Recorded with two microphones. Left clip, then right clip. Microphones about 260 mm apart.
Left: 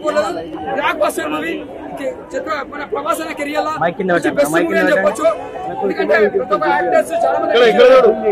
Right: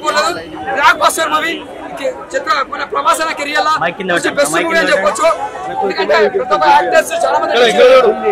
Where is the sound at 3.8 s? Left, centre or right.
Centre.